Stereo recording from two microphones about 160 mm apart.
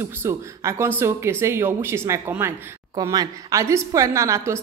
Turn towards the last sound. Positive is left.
turn(degrees=-20)  # may be behind; listen again after turning